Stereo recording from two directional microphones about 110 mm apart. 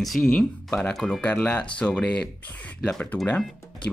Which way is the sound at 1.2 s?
15° left (ahead or behind).